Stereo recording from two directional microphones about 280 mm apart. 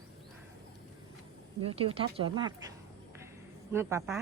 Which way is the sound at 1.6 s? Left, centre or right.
Right.